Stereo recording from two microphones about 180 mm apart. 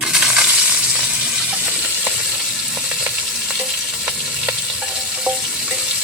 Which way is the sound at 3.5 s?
5° right (ahead or behind).